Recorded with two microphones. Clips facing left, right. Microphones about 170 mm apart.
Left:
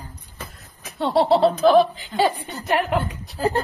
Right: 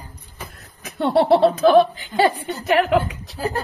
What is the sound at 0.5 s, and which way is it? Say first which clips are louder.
Speech: right 5 dB; 60° right (ahead or behind).